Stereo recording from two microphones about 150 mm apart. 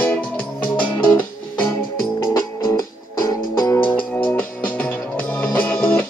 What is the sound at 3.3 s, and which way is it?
Music, 20° left (ahead or behind).